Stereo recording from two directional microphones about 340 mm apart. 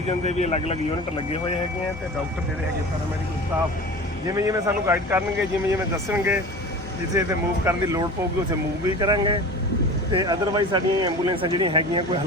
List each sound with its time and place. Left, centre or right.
0.3 s speech: centre
4.3 s speech: centre